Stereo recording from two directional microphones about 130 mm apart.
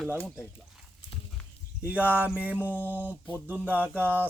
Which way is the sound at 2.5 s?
15° left (ahead or behind).